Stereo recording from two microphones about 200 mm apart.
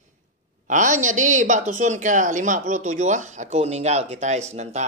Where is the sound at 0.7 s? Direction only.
40° right (ahead or behind).